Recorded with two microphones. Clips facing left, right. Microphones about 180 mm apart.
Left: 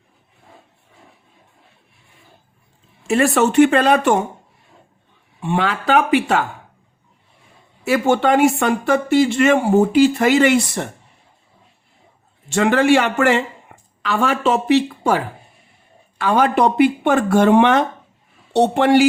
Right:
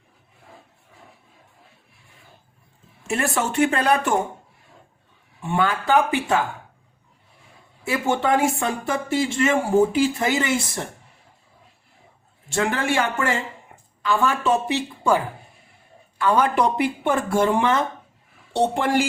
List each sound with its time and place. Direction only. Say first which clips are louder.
3.1 s speech: left 8 dB; 90° left
5.4 s speech: left 2 dB; 85° left
7.9 s speech: left 6 dB; 70° left (ahead or behind)
12.5 s a man's voice: left 9 dB; 80° left